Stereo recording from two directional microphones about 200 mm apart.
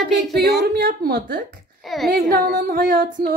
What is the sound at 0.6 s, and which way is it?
Speech, 50° right (ahead or behind).